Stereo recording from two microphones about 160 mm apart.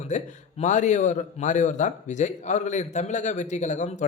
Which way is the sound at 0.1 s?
50° left (ahead or behind).